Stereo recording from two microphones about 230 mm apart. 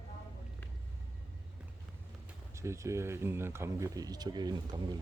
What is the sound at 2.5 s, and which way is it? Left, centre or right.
Speech, centre.